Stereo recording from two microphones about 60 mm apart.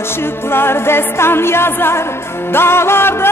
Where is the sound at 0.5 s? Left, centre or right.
Left.